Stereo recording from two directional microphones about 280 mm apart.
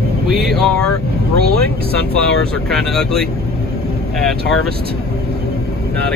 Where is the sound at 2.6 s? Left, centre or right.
Centre.